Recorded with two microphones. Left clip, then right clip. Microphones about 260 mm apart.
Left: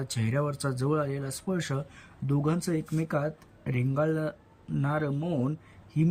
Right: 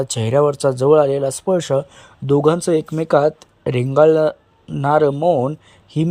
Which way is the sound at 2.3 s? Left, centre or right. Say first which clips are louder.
Right 16 dB; right.